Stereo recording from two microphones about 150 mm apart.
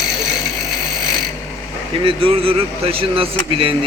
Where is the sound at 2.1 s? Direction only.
35° right (ahead or behind).